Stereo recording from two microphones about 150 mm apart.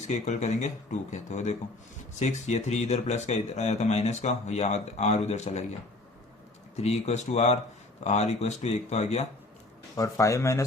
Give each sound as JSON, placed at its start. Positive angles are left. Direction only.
{"t": 0.0, "sound": "a man's voice", "side_deg": 50}
{"t": 6.7, "sound": "a man's voice", "side_deg": 45}
{"t": 9.9, "sound": "speech", "side_deg": 20}